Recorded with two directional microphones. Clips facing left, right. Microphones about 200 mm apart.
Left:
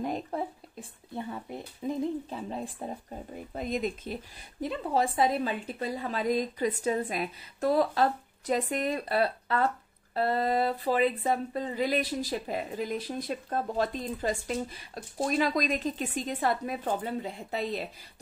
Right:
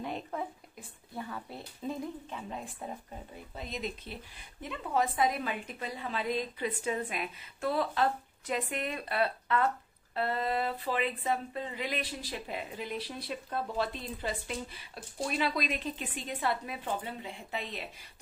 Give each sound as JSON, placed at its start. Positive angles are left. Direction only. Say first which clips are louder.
{"t": 0.0, "sound": "a sound", "louder": "left 5 dB", "side_deg": 40}
{"t": 1.1, "sound": "speech", "louder": "left 4 dB", "side_deg": 25}
{"t": 2.2, "sound": "a woman's voice", "louder": "left 5 dB", "side_deg": 35}
{"t": 3.5, "sound": "a woman's voice", "louder": "left 7 dB", "side_deg": 50}